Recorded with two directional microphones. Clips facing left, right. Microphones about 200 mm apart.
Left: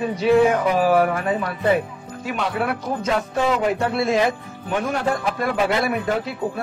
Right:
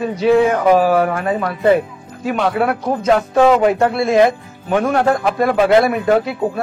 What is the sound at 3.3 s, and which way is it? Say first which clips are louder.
Music: right 9 dB; 70° right (ahead or behind).